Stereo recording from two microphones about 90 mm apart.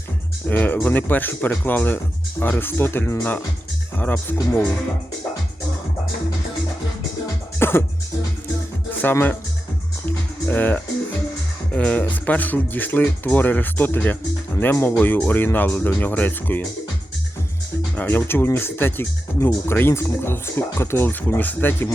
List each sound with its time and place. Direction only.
0.4 s speech: 20° left (ahead or behind)
7.6 s music: 25° left (ahead or behind)
8.9 s speech: 20° left (ahead or behind)
10.1 s music: 20° left (ahead or behind)
11.7 s speech: 15° left (ahead or behind)
17.9 s speech: 20° left (ahead or behind)